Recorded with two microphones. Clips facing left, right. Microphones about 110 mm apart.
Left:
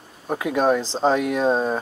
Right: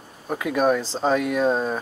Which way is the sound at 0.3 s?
20° left (ahead or behind).